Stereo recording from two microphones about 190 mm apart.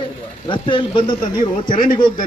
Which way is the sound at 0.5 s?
25° left (ahead or behind).